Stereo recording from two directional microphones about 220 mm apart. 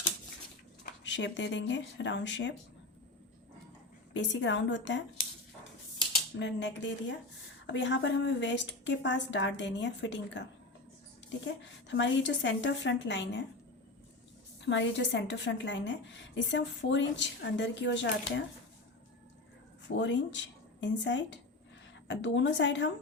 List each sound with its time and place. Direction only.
1.0 s a woman's voice: 55° left (ahead or behind)
4.1 s a woman's voice: 55° left (ahead or behind)
6.3 s a woman's voice: 55° left (ahead or behind)
11.4 s a woman's voice: 55° left (ahead or behind)
14.6 s a woman's voice: 55° left (ahead or behind)
20.0 s a woman's voice: 55° left (ahead or behind)